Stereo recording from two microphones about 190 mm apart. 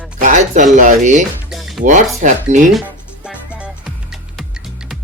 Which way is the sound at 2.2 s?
40° right (ahead or behind).